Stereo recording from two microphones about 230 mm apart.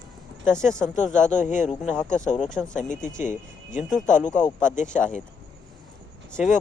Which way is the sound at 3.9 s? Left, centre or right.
Centre.